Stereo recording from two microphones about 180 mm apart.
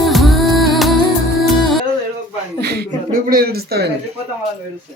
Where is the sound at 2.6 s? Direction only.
65° right (ahead or behind).